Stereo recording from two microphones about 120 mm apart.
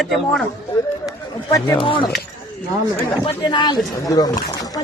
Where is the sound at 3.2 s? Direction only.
40° left (ahead or behind).